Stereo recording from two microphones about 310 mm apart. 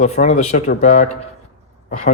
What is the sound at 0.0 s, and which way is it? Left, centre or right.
Speech, left.